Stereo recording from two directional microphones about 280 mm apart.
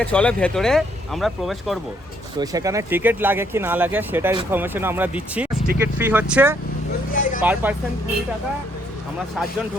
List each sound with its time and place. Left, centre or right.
0.0 s speech: centre
2.4 s speech: centre
7.1 s vehicle: left
7.4 s speech: centre